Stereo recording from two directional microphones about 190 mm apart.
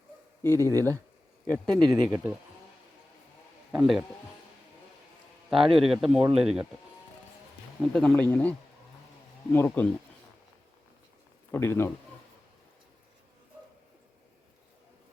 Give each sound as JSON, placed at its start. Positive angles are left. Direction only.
{"t": 0.4, "sound": "speech", "side_deg": 15}
{"t": 0.8, "sound": "speech", "side_deg": -15}
{"t": 1.6, "sound": "speech", "side_deg": 5}
{"t": 2.0, "sound": "speech", "side_deg": -10}
{"t": 3.7, "sound": "a man's voice", "side_deg": 0}
{"t": 5.5, "sound": "speech", "side_deg": 0}
{"t": 7.8, "sound": "speech", "side_deg": 5}
{"t": 11.5, "sound": "speech", "side_deg": 10}